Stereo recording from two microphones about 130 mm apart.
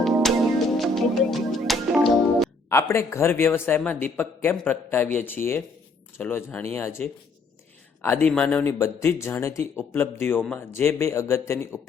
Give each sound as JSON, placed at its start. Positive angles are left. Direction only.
{"t": 0.0, "sound": "music", "side_deg": 0}
{"t": 2.6, "sound": "a man's voice", "side_deg": 20}
{"t": 8.8, "sound": "speech", "side_deg": 20}